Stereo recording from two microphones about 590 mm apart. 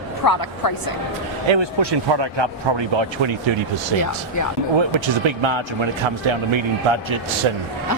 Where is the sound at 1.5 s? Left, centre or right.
Right.